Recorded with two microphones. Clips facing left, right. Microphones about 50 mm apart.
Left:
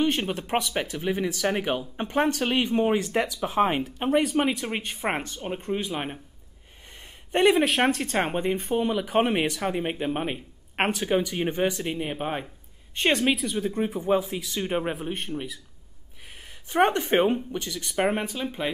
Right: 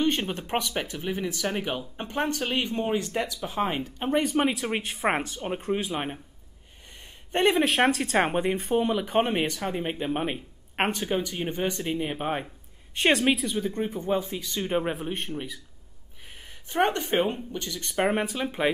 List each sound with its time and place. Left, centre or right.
0.0 s speech: centre
1.1 s speech: centre
4.1 s speech: centre
7.3 s speech: centre
11.1 s speech: centre
11.9 s speech: centre
17.1 s speech: left
17.6 s speech: centre
18.3 s speech: centre